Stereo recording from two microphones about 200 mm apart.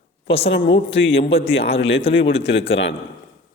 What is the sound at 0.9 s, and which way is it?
Speech, 70° left (ahead or behind).